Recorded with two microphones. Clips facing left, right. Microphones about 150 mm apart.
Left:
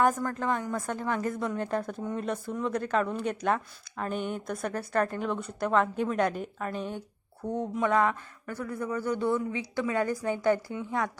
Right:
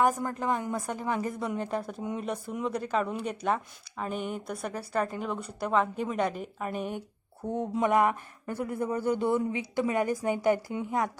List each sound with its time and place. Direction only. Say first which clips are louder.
0.3 s a woman's voice: even; 10° right (ahead or behind)